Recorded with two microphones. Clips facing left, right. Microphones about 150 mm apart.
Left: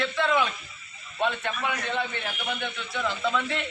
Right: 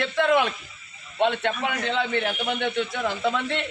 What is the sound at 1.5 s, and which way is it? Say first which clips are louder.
A man's voice: right 3 dB; 50° right (ahead or behind).